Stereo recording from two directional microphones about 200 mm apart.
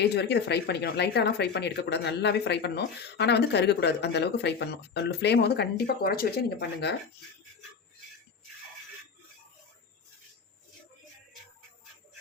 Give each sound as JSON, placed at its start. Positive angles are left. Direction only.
{"t": 0.0, "sound": "speech", "side_deg": 55}